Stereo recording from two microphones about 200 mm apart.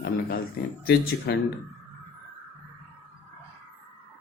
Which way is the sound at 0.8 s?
55° left (ahead or behind).